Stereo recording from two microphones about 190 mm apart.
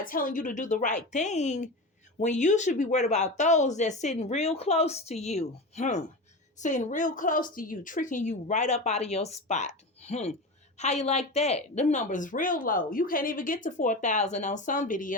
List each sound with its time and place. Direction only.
0.0 s a woman's voice: 45° left (ahead or behind)